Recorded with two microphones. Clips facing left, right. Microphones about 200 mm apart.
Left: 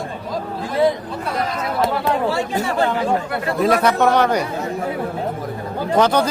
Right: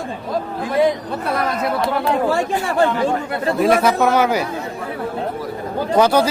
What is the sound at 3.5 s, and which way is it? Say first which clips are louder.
Speech: right 1 dB; centre (ahead or behind).